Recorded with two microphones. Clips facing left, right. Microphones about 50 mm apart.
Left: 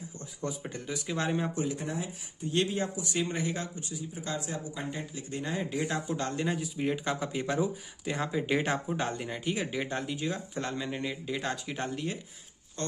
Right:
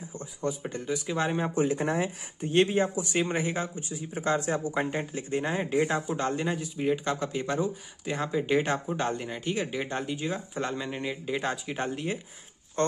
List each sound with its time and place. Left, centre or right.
0.4 s speech: centre
1.5 s speech: right
1.9 s speech: right
2.5 s speech: right
4.1 s speech: right
6.0 s speech: centre
12.8 s speech: right